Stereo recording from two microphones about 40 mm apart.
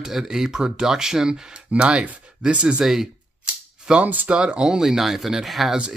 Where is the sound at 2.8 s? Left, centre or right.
Centre.